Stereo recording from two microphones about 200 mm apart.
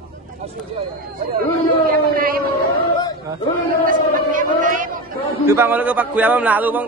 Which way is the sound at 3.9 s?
40° right (ahead or behind).